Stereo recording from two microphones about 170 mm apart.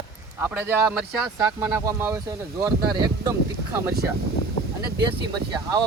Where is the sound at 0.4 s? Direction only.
10° right (ahead or behind).